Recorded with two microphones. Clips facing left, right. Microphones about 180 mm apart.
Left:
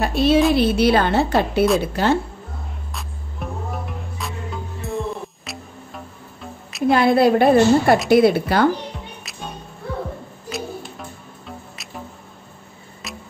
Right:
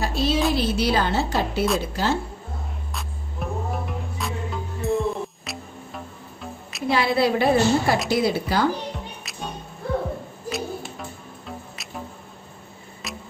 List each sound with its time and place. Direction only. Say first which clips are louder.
0.0 s a sound: left 6 dB; 60° left (ahead or behind)
0.6 s a woman's voice: left 6 dB; 60° left (ahead or behind)
2.9 s music: even; centre (ahead or behind)
6.9 s a woman's voice: left 6 dB; 50° left (ahead or behind)
8.9 s music: even; centre (ahead or behind)
10.5 s music: even; centre (ahead or behind)
13.0 s music: even; centre (ahead or behind)